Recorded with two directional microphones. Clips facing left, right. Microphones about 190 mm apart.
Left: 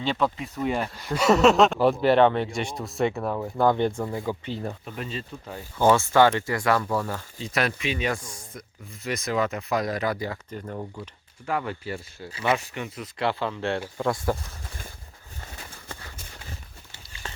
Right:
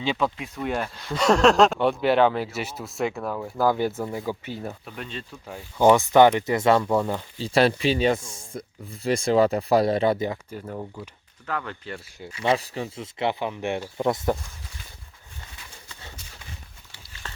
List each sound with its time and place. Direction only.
0.0 s speech: centre (ahead or behind)
5.5 s speech: 10° right (ahead or behind)
10.5 s speech: 5° right (ahead or behind)
11.4 s speech: 10° left (ahead or behind)
12.4 s speech: 35° right (ahead or behind)
15.5 s a sound: 55° left (ahead or behind)
17.2 s a sound: 15° left (ahead or behind)